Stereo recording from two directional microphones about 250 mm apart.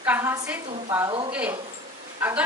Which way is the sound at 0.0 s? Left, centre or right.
Centre.